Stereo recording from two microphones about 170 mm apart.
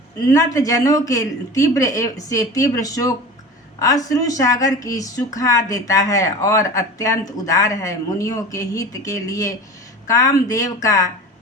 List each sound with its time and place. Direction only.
0.3 s speech: 20° left (ahead or behind)